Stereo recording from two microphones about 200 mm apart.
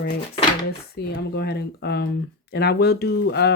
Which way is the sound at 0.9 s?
55° left (ahead or behind).